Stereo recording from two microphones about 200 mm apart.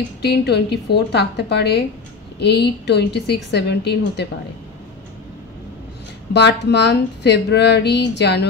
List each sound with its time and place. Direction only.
0.2 s speech: 55° left (ahead or behind)
6.3 s speech: 60° left (ahead or behind)